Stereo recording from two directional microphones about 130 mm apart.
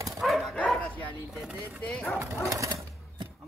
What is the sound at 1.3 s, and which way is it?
Speech, centre (ahead or behind).